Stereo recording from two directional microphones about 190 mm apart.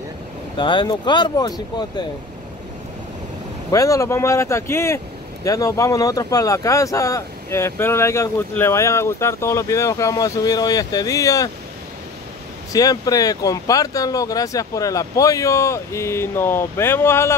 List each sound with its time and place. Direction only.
0.6 s speech: 25° left (ahead or behind)
3.7 s speech: 15° left (ahead or behind)
12.7 s speech: 20° left (ahead or behind)